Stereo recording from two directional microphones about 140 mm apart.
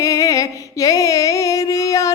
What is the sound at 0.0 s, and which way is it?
Music, 25° left (ahead or behind).